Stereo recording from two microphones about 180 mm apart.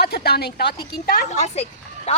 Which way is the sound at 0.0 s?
60° left (ahead or behind).